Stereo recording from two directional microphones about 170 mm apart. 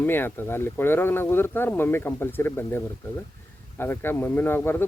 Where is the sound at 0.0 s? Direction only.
10° left (ahead or behind).